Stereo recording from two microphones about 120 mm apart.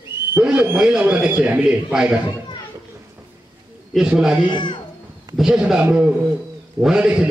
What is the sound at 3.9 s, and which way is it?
Speech, 5° right (ahead or behind).